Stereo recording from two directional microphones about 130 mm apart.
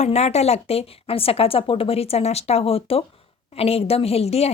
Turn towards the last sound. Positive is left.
turn(degrees=50)  # may be behind; listen again after turning